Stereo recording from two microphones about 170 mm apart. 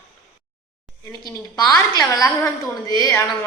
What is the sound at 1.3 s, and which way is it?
A woman's voice, 20° left (ahead or behind).